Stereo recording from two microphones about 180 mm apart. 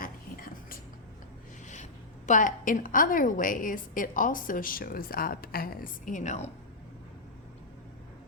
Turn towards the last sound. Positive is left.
turn(degrees=40)  # may be behind; listen again after turning